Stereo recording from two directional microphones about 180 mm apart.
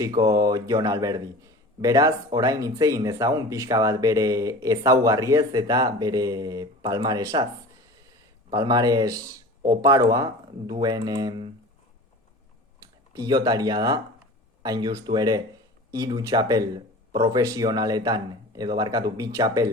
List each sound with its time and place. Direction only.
0.2 s speech: 20° right (ahead or behind)
8.4 s speech: 20° right (ahead or behind)
13.1 s speech: 20° right (ahead or behind)